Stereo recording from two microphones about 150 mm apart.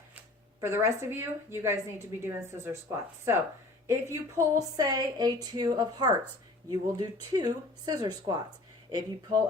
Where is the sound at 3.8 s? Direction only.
20° right (ahead or behind).